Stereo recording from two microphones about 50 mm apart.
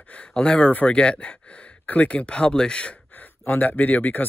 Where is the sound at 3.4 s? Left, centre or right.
Left.